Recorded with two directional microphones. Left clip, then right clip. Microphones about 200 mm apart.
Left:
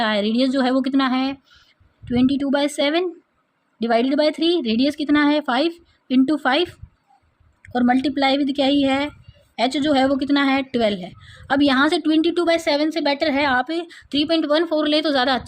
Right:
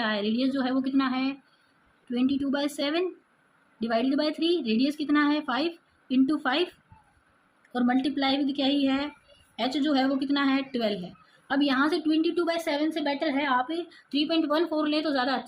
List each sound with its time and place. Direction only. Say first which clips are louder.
0.0 s a woman's voice: left 8 dB; 50° left (ahead or behind)